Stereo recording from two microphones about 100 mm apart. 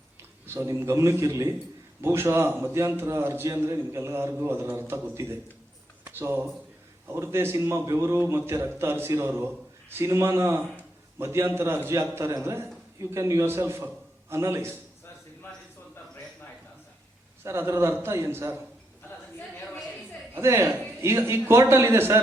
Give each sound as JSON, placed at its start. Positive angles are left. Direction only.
{"t": 0.4, "sound": "a man's voice", "side_deg": -25}
{"t": 17.4, "sound": "a man's voice", "side_deg": -25}
{"t": 20.3, "sound": "a man's voice", "side_deg": -25}